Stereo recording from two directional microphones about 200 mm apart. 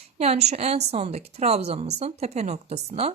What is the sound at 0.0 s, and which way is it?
A woman's voice, 30° right (ahead or behind).